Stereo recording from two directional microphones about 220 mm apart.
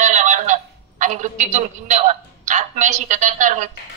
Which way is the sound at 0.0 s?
35° right (ahead or behind).